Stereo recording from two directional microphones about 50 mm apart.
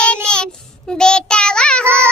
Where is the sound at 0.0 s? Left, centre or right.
Centre.